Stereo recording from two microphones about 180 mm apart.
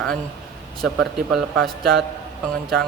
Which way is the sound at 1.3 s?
Centre (ahead or behind).